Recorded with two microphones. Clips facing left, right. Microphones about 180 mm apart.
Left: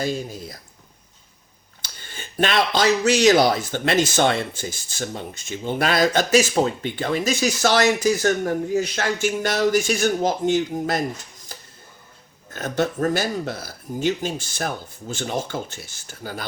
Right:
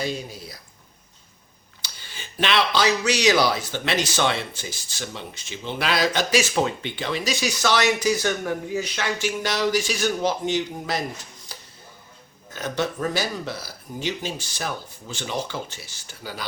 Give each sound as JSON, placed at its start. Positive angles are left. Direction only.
{"t": 0.0, "sound": "speech", "side_deg": 45}
{"t": 1.8, "sound": "speech", "side_deg": 50}
{"t": 12.5, "sound": "speech", "side_deg": 50}